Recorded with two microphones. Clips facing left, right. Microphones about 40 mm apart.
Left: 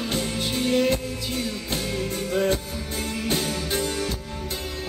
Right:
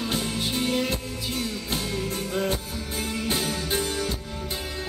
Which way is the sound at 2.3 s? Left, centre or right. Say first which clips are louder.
Left 5 dB; centre.